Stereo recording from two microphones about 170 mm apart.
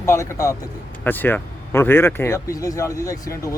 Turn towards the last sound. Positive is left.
turn(degrees=20)  # may be behind; listen again after turning